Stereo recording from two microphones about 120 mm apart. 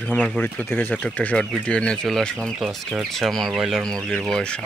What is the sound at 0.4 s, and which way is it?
Speech, 10° left (ahead or behind).